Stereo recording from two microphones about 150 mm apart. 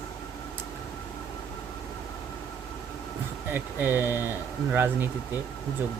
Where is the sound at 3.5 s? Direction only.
15° right (ahead or behind).